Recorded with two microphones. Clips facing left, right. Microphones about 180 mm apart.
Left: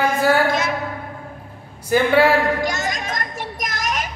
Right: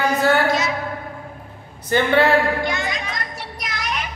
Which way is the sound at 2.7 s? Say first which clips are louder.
Left 1 dB; 45° left (ahead or behind).